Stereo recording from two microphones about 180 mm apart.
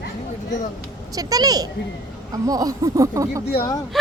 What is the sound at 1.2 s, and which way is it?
Speech, 20° right (ahead or behind).